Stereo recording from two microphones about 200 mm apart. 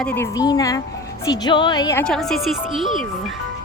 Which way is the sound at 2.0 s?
5° left (ahead or behind).